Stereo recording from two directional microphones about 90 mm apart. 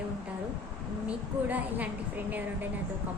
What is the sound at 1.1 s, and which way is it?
Speech, 15° right (ahead or behind).